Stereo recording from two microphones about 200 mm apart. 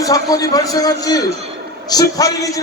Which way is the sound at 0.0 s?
20° left (ahead or behind).